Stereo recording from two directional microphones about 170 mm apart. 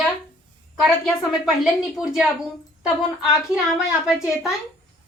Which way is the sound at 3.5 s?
5° right (ahead or behind).